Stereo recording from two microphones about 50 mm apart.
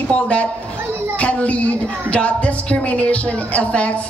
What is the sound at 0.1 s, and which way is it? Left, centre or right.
Speech, left.